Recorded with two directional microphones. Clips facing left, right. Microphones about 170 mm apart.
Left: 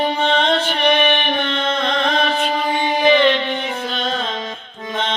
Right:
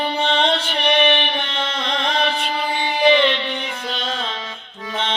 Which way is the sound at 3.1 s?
45° left (ahead or behind).